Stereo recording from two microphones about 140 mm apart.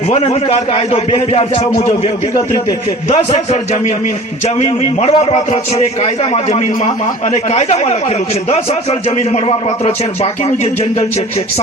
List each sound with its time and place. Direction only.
0.1 s speech: 45° left (ahead or behind)
3.1 s speech: 50° left (ahead or behind)